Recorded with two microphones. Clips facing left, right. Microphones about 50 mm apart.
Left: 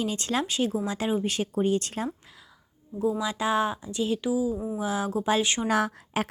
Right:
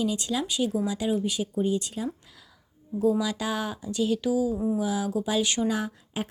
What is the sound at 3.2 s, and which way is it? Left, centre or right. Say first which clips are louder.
Speech: left 3 dB; left.